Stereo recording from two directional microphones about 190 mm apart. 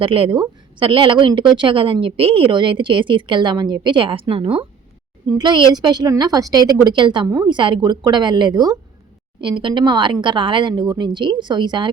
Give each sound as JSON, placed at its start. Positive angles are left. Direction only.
{"t": 0.0, "sound": "a woman's voice", "side_deg": -30}